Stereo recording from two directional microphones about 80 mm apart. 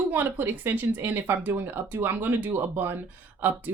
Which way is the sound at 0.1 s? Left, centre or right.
Right.